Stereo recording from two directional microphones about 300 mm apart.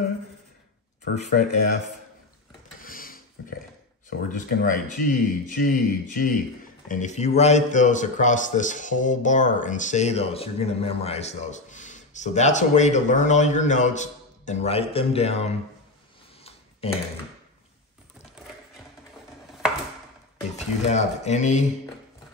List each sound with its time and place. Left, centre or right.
1.1 s speech: left
2.8 s a sound: left
4.3 s speech: left
16.8 s speech: centre
20.5 s speech: left